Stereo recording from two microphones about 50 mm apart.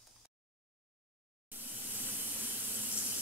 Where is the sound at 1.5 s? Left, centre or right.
Right.